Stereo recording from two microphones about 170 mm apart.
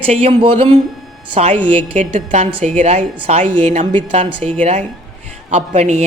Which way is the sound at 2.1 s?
45° right (ahead or behind).